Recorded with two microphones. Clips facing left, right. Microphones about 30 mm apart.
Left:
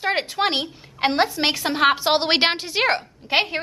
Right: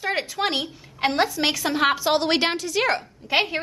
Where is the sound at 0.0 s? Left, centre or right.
Left.